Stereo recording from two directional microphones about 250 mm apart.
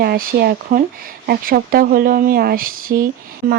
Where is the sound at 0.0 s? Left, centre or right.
Right.